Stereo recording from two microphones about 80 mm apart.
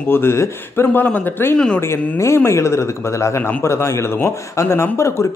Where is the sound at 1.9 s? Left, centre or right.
Left.